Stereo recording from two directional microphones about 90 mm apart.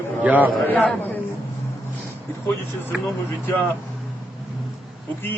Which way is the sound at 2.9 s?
15° right (ahead or behind).